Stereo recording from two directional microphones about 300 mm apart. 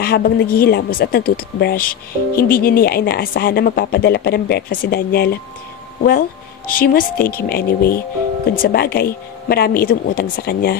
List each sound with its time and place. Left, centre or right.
0.0 s speech: left
6.7 s speech: left